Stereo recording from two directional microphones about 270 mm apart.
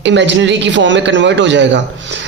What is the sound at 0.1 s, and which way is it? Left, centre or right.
A man's voice, right.